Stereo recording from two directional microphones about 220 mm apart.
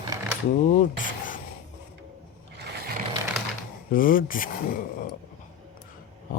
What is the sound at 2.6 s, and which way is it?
Ratchet, 45° right (ahead or behind).